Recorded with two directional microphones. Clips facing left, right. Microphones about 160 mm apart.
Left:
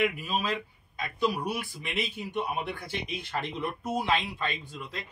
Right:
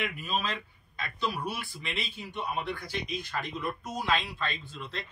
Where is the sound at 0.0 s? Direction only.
10° left (ahead or behind).